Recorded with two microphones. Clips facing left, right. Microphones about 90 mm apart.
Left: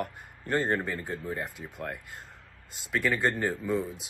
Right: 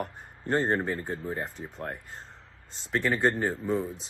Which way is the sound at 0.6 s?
25° right (ahead or behind).